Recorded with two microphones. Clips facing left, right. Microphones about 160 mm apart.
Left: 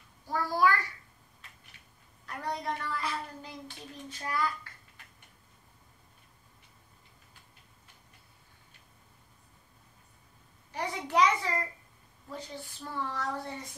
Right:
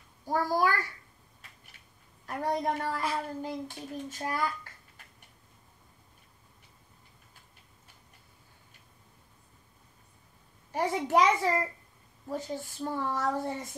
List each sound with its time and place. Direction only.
0.3 s a child's voice: 45° right (ahead or behind)
2.2 s speech: 45° right (ahead or behind)
10.7 s speech: 45° right (ahead or behind)